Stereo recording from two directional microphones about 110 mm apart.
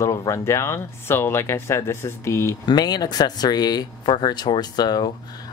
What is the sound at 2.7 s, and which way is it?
Speech, 35° left (ahead or behind).